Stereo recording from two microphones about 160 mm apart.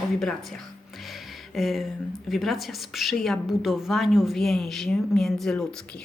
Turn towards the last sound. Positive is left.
turn(degrees=0)  # may be behind; listen again after turning